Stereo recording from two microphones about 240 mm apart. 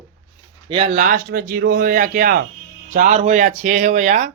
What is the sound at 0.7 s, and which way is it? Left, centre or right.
Speech, right.